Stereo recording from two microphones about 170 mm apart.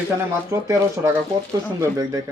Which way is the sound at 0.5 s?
15° right (ahead or behind).